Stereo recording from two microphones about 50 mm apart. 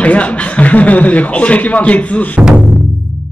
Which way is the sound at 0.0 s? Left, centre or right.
Left.